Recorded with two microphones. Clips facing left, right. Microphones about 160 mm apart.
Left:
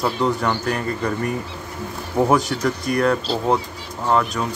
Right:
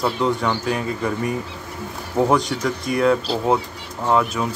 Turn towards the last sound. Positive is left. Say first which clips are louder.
# right 1 dB
turn(degrees=-5)  # may be behind; listen again after turning